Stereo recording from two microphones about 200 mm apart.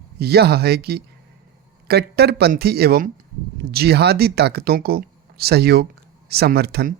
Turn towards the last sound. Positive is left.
turn(degrees=-55)  # may be behind; listen again after turning